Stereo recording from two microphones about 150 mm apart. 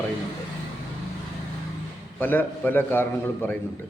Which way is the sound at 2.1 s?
15° left (ahead or behind).